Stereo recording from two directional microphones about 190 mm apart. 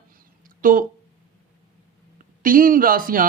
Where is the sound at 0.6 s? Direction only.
45° right (ahead or behind).